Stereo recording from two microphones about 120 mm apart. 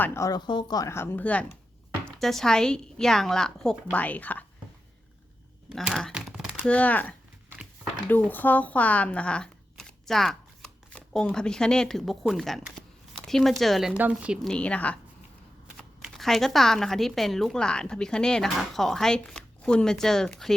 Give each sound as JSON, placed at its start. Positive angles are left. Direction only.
{"t": 0.0, "sound": "speech", "side_deg": 20}
{"t": 0.3, "sound": "speech", "side_deg": 40}
{"t": 0.9, "sound": "speech", "side_deg": 20}
{"t": 5.6, "sound": "a sound", "side_deg": 0}
{"t": 6.7, "sound": "speech", "side_deg": 10}
{"t": 13.9, "sound": "speech", "side_deg": -10}
{"t": 14.4, "sound": "speech", "side_deg": 10}